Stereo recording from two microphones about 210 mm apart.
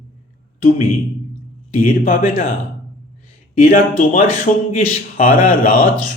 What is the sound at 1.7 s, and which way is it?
Speech, 40° left (ahead or behind).